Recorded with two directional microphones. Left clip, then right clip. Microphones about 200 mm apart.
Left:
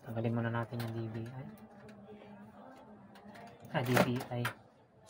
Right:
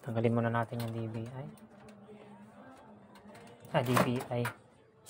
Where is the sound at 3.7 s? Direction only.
60° right (ahead or behind).